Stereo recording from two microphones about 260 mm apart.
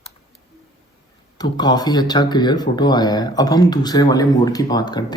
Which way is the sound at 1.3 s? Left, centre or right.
Centre.